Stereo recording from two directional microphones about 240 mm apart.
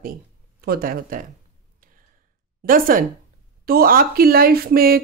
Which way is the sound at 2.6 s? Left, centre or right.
Right.